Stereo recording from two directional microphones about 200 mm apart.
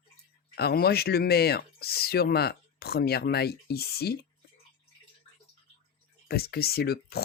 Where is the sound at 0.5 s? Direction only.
50° left (ahead or behind).